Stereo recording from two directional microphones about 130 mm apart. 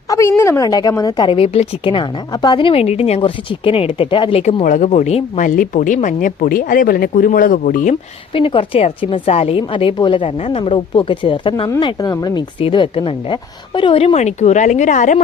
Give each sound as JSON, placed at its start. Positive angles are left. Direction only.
{"t": 0.1, "sound": "a woman's voice", "side_deg": 20}
{"t": 4.6, "sound": "speech", "side_deg": 75}
{"t": 8.3, "sound": "a woman's voice", "side_deg": 45}